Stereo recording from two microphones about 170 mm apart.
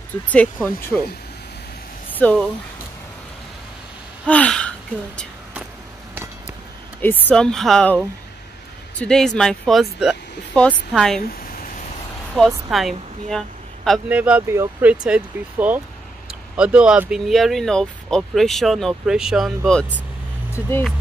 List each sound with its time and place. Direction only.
0.3 s speech: 10° left (ahead or behind)
2.2 s speech: 10° left (ahead or behind)
4.3 s speech: 5° left (ahead or behind)
7.0 s speech: 10° left (ahead or behind)
9.0 s speech: 5° left (ahead or behind)
11.1 s a sound: 55° left (ahead or behind)
12.4 s speech: centre (ahead or behind)